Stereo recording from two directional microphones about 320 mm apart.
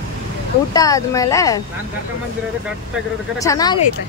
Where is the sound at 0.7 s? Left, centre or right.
Centre.